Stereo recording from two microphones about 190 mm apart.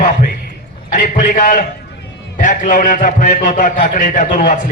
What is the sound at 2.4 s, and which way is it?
A man's voice, 45° left (ahead or behind).